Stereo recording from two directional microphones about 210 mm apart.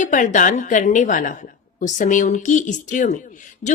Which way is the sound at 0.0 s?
35° left (ahead or behind).